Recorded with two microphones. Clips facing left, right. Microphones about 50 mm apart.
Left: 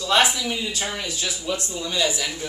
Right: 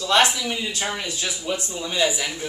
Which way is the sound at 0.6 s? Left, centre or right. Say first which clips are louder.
Right 1 dB; right.